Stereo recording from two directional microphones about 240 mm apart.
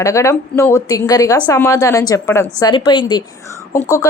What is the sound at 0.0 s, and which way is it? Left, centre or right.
A woman's voice, centre.